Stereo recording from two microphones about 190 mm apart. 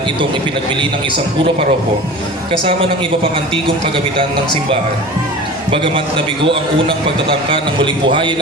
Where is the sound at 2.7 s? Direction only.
30° right (ahead or behind).